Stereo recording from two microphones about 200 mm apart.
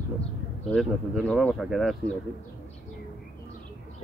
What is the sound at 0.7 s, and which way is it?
Speech, 5° left (ahead or behind).